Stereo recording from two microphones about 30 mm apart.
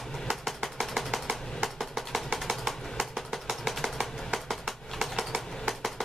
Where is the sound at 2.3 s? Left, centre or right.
Centre.